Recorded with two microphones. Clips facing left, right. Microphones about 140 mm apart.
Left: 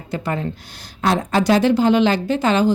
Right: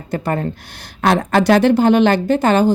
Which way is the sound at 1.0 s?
65° right (ahead or behind).